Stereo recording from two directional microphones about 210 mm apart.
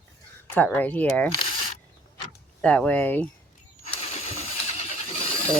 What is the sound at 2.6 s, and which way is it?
Speech, 5° left (ahead or behind).